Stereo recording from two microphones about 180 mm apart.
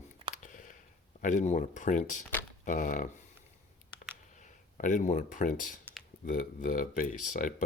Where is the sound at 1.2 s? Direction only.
45° left (ahead or behind).